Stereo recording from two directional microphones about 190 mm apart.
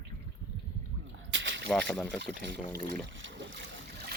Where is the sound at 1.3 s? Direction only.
75° right (ahead or behind).